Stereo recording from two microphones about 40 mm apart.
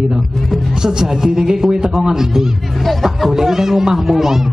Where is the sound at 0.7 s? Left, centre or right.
Centre.